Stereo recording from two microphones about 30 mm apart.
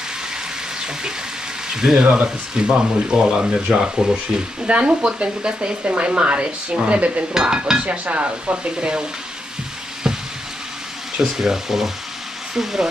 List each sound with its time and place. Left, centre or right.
1.7 s speech: right
7.3 s dishes: right
7.9 s speech: right
10.1 s frying: right
11.2 s speech: centre